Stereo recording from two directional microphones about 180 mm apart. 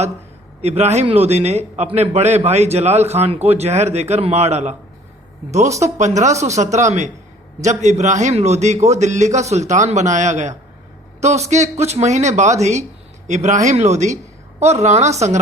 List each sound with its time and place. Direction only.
0.6 s a man's voice: 35° right (ahead or behind)